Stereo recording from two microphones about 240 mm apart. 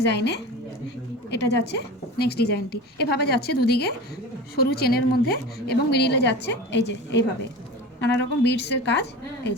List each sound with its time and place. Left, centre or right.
0.1 s a woman's voice: left